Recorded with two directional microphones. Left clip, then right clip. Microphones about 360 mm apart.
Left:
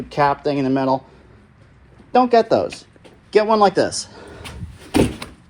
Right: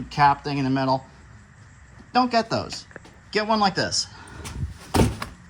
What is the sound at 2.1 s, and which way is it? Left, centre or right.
Speech, centre.